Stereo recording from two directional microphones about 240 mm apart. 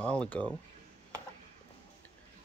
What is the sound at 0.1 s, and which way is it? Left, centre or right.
Speech, centre.